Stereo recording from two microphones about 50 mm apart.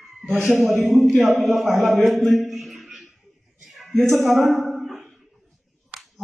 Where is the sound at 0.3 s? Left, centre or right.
Right.